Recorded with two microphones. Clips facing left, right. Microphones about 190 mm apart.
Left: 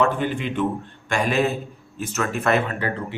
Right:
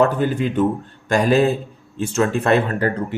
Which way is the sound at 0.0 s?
40° right (ahead or behind).